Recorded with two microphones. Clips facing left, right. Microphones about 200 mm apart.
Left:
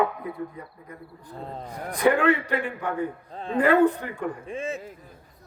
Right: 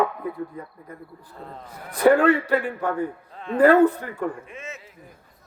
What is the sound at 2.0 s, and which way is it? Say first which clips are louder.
Speech: right 4 dB; 40° right (ahead or behind).